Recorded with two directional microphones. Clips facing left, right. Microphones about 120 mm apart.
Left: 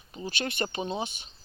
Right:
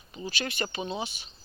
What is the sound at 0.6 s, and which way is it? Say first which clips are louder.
Speech: left 2 dB; 30° left (ahead or behind).